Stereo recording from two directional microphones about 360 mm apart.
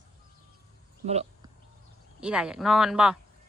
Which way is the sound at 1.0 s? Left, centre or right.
Centre.